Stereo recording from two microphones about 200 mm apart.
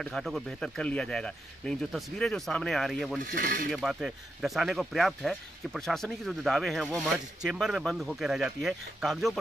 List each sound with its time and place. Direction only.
0.0 s speech: centre (ahead or behind)
3.3 s speech: 45° right (ahead or behind)
3.7 s speech: centre (ahead or behind)